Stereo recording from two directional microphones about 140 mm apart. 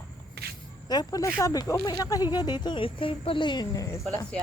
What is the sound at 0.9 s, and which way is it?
Speech, 25° left (ahead or behind).